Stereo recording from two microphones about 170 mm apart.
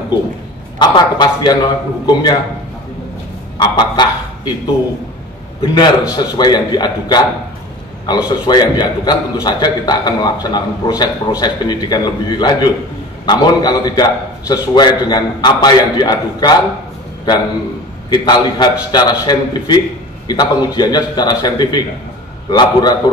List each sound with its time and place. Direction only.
0.7 s a man's voice: 25° left (ahead or behind)
3.5 s a man's voice: 30° left (ahead or behind)
6.1 s a man's voice: 25° left (ahead or behind)
18.1 s a man's voice: 25° left (ahead or behind)